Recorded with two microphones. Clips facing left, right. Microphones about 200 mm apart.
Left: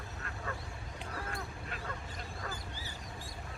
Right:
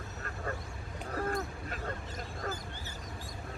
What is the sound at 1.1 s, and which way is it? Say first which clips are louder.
Duck: right 9 dB; 45° right (ahead or behind).